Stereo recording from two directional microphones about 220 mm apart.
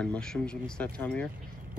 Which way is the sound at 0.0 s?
5° left (ahead or behind).